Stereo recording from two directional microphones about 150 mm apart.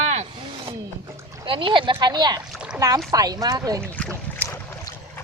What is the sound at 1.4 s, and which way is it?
Speech, 35° right (ahead or behind).